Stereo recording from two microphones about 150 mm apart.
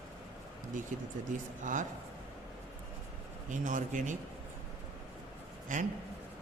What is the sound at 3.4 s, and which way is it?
Speech, 60° right (ahead or behind).